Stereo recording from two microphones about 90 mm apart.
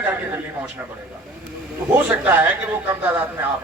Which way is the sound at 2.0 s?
20° right (ahead or behind).